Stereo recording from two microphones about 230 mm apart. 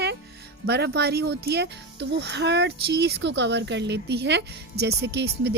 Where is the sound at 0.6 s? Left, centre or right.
Right.